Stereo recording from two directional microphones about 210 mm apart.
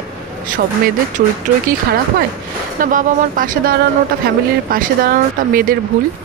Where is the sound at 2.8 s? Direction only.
40° right (ahead or behind).